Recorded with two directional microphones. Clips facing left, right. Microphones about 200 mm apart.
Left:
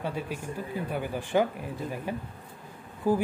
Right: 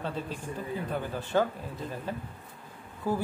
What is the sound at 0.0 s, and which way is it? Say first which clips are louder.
Speech: left 2 dB; 10° left (ahead or behind).